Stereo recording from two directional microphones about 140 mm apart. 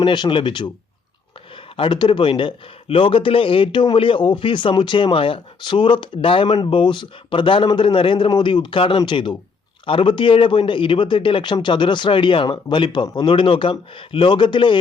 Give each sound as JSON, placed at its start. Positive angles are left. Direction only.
{"t": 0.0, "sound": "speech", "side_deg": 35}
{"t": 1.7, "sound": "speech", "side_deg": 35}